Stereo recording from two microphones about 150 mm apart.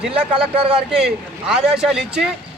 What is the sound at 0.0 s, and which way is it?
Speech, 10° right (ahead or behind).